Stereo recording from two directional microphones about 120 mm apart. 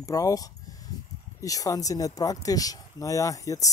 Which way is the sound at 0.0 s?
25° left (ahead or behind).